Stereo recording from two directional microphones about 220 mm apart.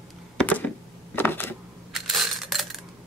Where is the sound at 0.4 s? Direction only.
5° left (ahead or behind).